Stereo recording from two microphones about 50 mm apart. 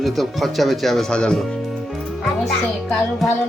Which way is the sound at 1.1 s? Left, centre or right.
Centre.